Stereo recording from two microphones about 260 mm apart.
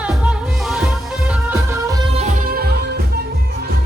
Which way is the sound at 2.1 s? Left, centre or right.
Right.